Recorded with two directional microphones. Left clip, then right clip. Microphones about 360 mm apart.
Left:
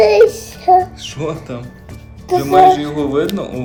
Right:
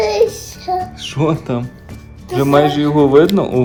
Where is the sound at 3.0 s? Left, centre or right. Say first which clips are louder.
Right 7 dB; right.